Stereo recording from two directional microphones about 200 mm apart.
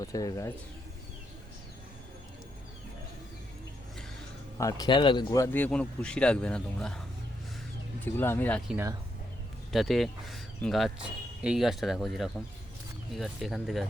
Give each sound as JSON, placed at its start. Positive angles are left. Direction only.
{"t": 0.0, "sound": "speech", "side_deg": 15}
{"t": 4.5, "sound": "speech", "side_deg": 15}
{"t": 8.0, "sound": "speech", "side_deg": 10}
{"t": 8.7, "sound": "speech", "side_deg": -15}
{"t": 9.7, "sound": "speech", "side_deg": 0}